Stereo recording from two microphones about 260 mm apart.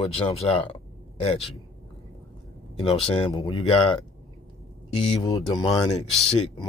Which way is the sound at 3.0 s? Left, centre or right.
Centre.